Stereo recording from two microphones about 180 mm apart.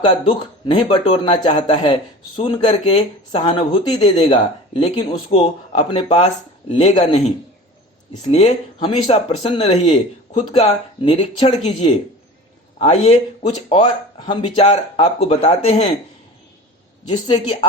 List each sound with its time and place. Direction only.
0.0 s speech: 30° left (ahead or behind)